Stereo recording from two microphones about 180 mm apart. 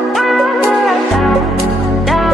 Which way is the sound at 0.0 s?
Centre (ahead or behind).